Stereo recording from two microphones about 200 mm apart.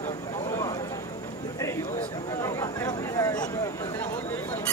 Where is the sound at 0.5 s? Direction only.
15° left (ahead or behind).